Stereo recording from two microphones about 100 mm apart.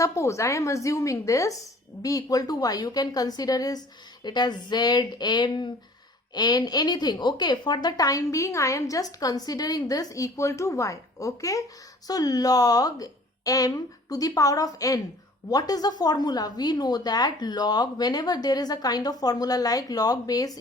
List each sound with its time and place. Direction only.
0.0 s a woman's voice: 30° left (ahead or behind)